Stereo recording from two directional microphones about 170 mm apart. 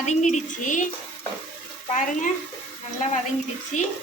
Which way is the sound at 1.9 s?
50° left (ahead or behind).